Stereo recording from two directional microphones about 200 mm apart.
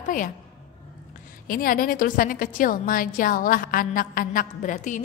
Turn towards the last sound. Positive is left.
turn(degrees=40)  # may be behind; listen again after turning